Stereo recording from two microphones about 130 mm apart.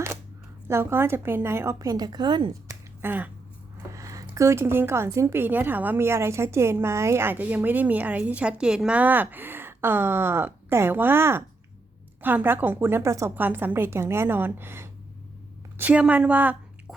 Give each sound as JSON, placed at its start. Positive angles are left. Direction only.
{"t": 0.7, "sound": "a woman's voice", "side_deg": -20}
{"t": 3.0, "sound": "speech", "side_deg": -15}
{"t": 3.9, "sound": "speech", "side_deg": -25}